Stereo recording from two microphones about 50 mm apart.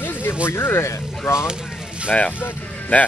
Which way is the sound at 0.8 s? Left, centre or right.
Left.